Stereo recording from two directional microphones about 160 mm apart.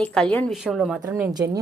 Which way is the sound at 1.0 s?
15° right (ahead or behind).